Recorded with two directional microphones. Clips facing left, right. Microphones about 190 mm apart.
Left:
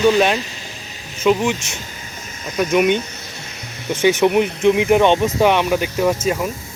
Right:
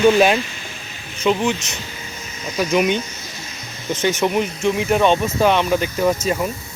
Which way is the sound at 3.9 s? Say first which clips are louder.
Left 4 dB; 15° left (ahead or behind).